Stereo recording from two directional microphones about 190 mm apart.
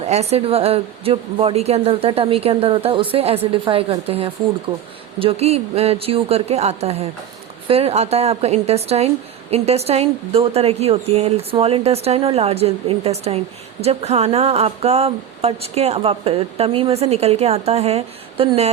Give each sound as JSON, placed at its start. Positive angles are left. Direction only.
{"t": 0.0, "sound": "speech", "side_deg": -35}
{"t": 5.2, "sound": "speech", "side_deg": -35}